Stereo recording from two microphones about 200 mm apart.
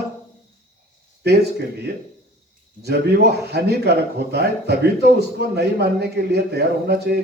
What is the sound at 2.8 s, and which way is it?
A man's voice, 55° right (ahead or behind).